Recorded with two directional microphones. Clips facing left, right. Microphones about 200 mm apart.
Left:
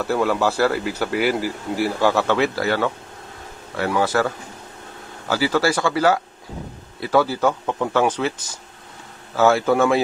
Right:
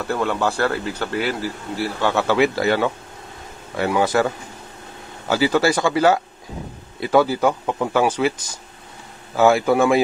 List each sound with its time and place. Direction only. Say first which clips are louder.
0.0 s speech: left 2 dB; 5° left (ahead or behind)
2.2 s speech: right 2 dB; 15° right (ahead or behind)
5.3 s speech: right 2 dB; 20° right (ahead or behind)